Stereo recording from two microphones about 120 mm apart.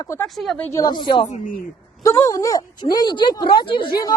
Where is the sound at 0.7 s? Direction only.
35° left (ahead or behind).